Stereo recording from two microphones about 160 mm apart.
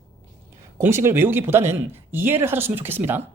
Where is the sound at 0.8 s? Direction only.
15° right (ahead or behind).